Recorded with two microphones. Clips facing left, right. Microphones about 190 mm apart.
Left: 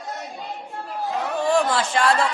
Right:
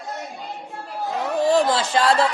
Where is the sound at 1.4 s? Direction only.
40° right (ahead or behind).